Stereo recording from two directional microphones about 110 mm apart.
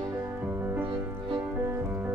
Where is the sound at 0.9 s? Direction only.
50° right (ahead or behind).